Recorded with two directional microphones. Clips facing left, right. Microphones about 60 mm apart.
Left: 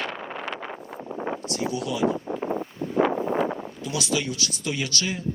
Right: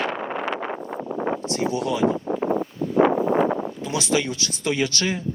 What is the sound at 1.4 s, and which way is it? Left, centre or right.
Speech, right.